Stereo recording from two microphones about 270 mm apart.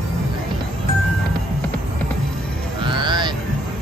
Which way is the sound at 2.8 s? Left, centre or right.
Centre.